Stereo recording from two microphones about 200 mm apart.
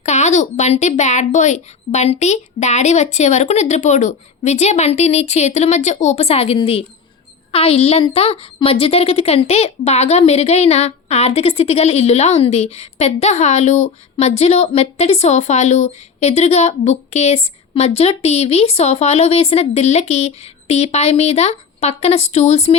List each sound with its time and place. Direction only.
0.0 s a woman's voice: 35° left (ahead or behind)